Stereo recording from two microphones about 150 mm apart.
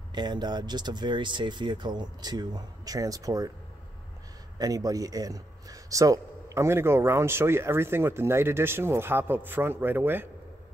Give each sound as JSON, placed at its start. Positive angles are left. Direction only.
{"t": 0.1, "sound": "speech", "side_deg": -30}
{"t": 4.6, "sound": "speech", "side_deg": -25}